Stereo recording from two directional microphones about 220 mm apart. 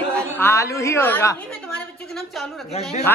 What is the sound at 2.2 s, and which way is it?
Speech, centre (ahead or behind).